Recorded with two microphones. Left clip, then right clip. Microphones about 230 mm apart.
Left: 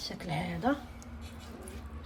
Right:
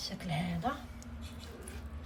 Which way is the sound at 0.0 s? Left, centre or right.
Centre.